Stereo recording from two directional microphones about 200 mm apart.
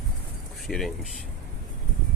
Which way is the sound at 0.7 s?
Centre (ahead or behind).